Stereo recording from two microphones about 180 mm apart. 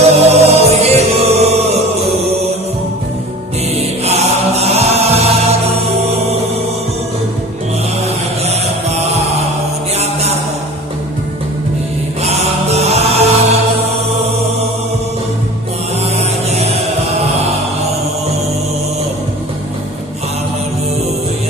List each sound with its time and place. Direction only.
0.0 s music: 35° right (ahead or behind)
3.8 s chant: 35° right (ahead or behind)
9.9 s music: 35° right (ahead or behind)
12.2 s chant: 35° right (ahead or behind)
16.0 s music: 35° right (ahead or behind)